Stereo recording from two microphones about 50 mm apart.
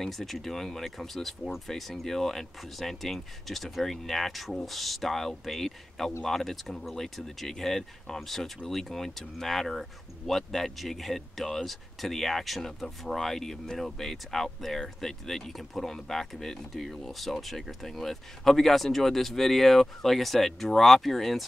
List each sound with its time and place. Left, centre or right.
0.0 s speech: centre